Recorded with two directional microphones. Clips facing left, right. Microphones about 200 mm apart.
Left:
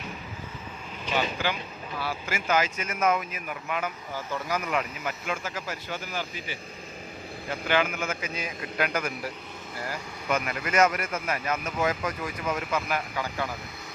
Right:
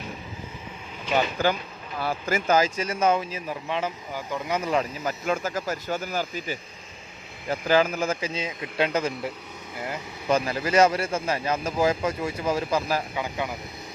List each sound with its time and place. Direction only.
1.1 s speech: 45° right (ahead or behind); by 3.9 s 25° right (ahead or behind)
4.1 s speech: 15° right (ahead or behind)
10.2 s speech: 30° right (ahead or behind)
13.1 s speech: 20° right (ahead or behind)